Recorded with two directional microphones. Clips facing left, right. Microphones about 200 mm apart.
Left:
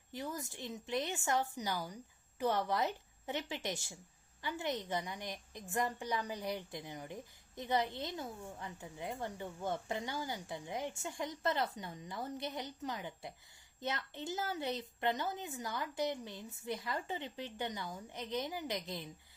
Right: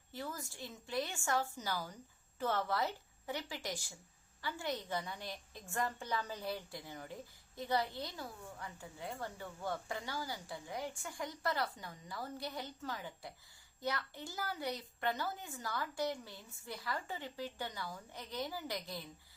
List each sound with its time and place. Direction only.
0.1 s a woman's voice: 15° left (ahead or behind)